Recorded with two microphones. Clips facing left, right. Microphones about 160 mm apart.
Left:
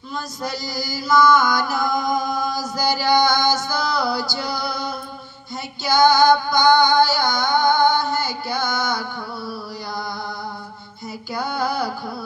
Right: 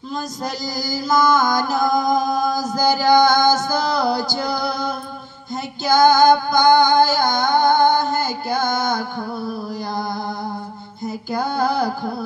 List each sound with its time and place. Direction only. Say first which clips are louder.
0.1 s mantra: right 2 dB; 45° right (ahead or behind)
5.9 s music: right 2 dB; 50° right (ahead or behind)
11.2 s music: right 3 dB; 50° right (ahead or behind)